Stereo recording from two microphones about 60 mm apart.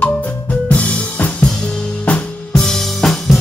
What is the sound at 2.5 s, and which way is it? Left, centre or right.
Music, centre.